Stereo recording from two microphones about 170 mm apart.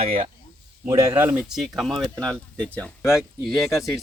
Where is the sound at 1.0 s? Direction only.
10° right (ahead or behind).